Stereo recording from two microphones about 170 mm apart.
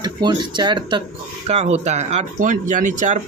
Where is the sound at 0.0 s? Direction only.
25° right (ahead or behind).